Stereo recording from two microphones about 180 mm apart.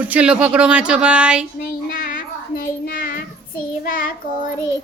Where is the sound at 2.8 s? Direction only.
50° left (ahead or behind).